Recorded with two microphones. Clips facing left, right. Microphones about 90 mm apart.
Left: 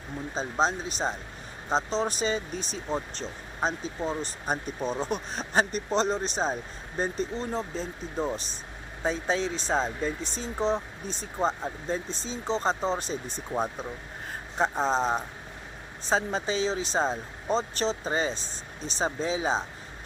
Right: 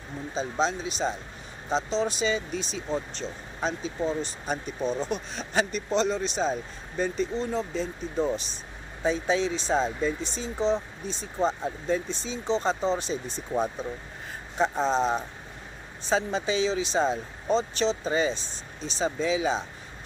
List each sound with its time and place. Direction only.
0.3 s speech: 40° left (ahead or behind)